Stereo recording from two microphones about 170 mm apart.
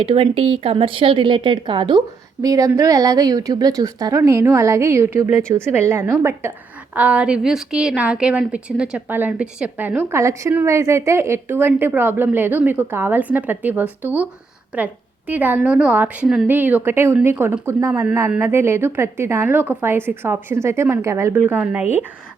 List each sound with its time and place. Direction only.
0.0 s a woman's voice: 30° right (ahead or behind); by 21.8 s 10° right (ahead or behind)